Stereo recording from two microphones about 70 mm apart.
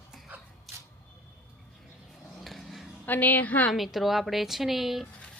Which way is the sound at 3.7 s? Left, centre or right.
Centre.